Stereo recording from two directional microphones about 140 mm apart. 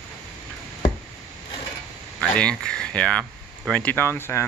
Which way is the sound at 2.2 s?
5° left (ahead or behind).